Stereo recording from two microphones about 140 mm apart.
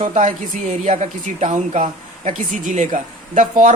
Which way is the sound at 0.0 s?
55° right (ahead or behind).